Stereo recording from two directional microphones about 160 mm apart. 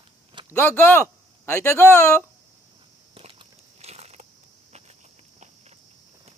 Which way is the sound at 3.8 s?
40° right (ahead or behind).